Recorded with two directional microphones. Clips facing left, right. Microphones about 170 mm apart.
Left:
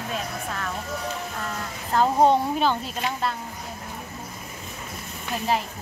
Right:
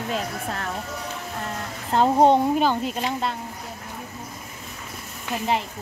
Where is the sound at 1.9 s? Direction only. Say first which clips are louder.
Right 2 dB; 20° right (ahead or behind).